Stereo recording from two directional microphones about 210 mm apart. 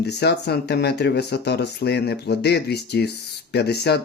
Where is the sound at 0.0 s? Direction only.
55° left (ahead or behind).